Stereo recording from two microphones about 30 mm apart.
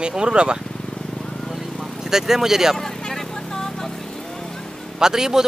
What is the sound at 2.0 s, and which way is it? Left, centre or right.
Speech, centre.